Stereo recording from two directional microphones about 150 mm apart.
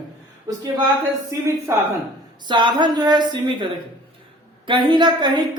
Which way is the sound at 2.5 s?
30° right (ahead or behind).